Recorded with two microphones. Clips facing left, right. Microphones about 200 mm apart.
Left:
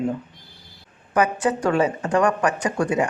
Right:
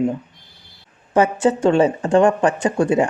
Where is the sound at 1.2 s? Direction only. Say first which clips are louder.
Right 4 dB; 25° right (ahead or behind).